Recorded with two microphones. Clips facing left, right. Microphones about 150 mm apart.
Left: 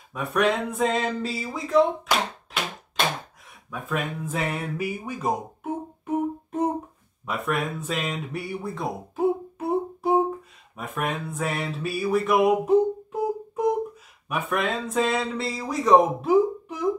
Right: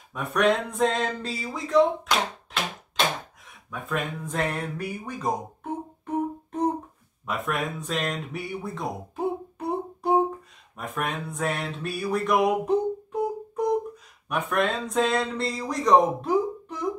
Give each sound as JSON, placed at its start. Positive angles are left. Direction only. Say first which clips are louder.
{"t": 0.1, "sound": "speech", "louder": "even", "side_deg": 0}
{"t": 3.7, "sound": "speech", "louder": "left 1 dB", "side_deg": 0}
{"t": 10.8, "sound": "a sound", "louder": "left 1 dB", "side_deg": 0}
{"t": 14.3, "sound": "speech", "louder": "right 1 dB", "side_deg": 0}